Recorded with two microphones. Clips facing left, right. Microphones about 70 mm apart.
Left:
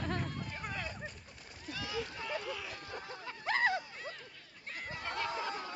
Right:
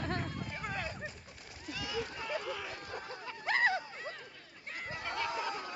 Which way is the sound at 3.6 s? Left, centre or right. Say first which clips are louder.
Right 1 dB; right.